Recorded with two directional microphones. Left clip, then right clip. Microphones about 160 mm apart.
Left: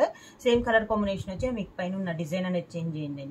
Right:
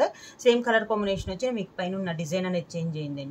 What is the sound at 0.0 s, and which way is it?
Speech, 60° right (ahead or behind).